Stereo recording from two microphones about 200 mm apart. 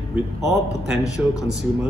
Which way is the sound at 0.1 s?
Centre (ahead or behind).